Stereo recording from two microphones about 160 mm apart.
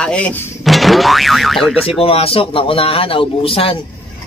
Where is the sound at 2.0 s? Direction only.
35° left (ahead or behind).